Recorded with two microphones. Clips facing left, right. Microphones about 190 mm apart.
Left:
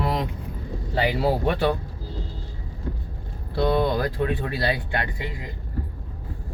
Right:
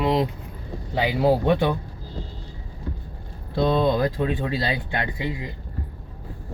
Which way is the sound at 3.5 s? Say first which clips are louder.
Right 1 dB; 20° right (ahead or behind).